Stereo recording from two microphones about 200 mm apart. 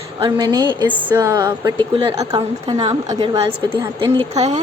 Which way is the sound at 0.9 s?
10° right (ahead or behind).